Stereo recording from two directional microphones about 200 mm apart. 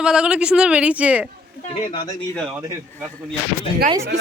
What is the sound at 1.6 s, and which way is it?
Speech, 25° left (ahead or behind).